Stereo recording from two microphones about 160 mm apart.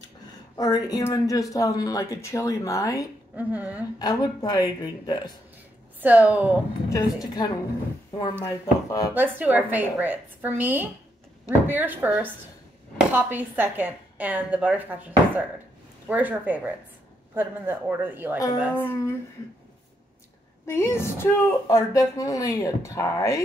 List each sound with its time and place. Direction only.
0.6 s speech: 25° left (ahead or behind)
3.3 s speech: 10° right (ahead or behind)
4.0 s speech: 25° left (ahead or behind)
5.9 s speech: 10° right (ahead or behind)
8.1 s speech: 25° left (ahead or behind)
9.1 s speech: 10° right (ahead or behind)
18.9 s speech: 15° left (ahead or behind)
20.6 s speech: 15° left (ahead or behind)